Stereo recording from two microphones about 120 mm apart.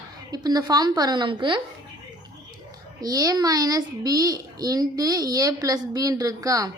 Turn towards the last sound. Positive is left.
turn(degrees=-30)  # may be behind; listen again after turning